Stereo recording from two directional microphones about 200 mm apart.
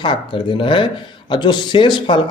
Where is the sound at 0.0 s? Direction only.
25° left (ahead or behind).